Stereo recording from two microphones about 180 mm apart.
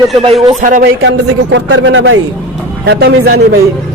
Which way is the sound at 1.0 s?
90° right.